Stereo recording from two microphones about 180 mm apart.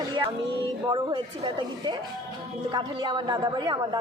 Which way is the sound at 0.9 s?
25° right (ahead or behind).